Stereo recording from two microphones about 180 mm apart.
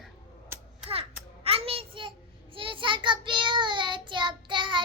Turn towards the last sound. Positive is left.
turn(degrees=-25)  # may be behind; listen again after turning